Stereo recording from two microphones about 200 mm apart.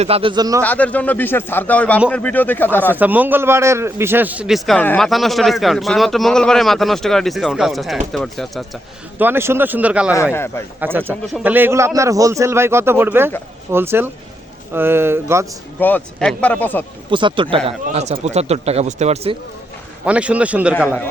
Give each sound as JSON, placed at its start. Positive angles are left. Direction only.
{"t": 0.0, "sound": "speech", "side_deg": -30}
{"t": 0.6, "sound": "speech", "side_deg": 5}
{"t": 2.9, "sound": "a man's voice", "side_deg": -10}
{"t": 10.3, "sound": "speech", "side_deg": 10}
{"t": 10.8, "sound": "speech", "side_deg": -10}
{"t": 15.8, "sound": "speech", "side_deg": 10}
{"t": 17.1, "sound": "speech", "side_deg": -25}
{"t": 20.1, "sound": "speech", "side_deg": -5}